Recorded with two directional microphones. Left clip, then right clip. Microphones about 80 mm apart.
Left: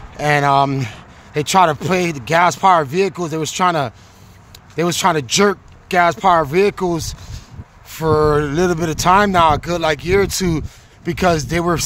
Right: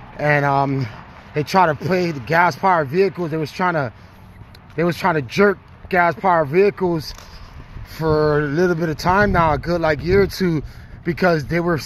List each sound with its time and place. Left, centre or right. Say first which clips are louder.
0.2 s speech: left 3 dB; left
0.7 s speech: left 2 dB; left
1.3 s speech: left 3 dB; left
4.7 s speech: left 3 dB; left
8.0 s mantra: left 3 dB; left
8.5 s speech: left 1 dB; left